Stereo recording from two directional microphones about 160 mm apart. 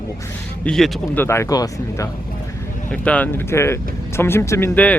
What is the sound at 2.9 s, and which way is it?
Speech, 10° left (ahead or behind).